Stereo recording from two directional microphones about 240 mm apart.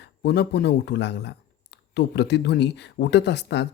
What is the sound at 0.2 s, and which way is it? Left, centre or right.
Speech, left.